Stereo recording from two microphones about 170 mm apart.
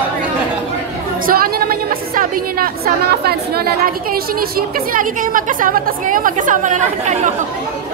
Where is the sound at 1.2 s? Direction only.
60° right (ahead or behind).